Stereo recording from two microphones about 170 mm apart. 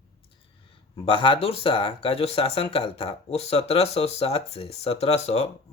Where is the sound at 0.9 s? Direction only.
30° left (ahead or behind).